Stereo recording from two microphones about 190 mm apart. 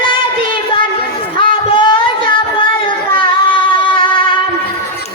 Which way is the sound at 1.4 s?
25° left (ahead or behind).